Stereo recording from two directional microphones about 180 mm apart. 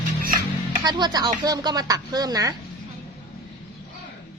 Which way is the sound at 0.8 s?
20° right (ahead or behind).